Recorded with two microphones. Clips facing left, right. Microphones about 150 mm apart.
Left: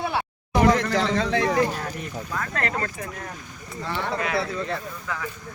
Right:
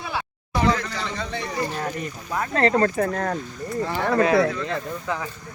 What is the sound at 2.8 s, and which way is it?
Speech, 50° right (ahead or behind).